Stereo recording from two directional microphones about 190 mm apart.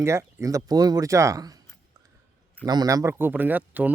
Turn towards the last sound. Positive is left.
turn(degrees=-10)  # may be behind; listen again after turning